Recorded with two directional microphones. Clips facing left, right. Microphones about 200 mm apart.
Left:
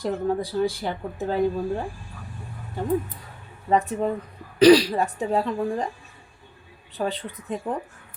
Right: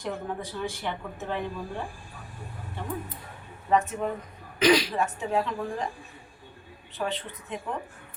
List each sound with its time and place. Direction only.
0.0 s speech: 35° left (ahead or behind)
3.7 s speech: 35° left (ahead or behind)
6.9 s speech: 35° left (ahead or behind)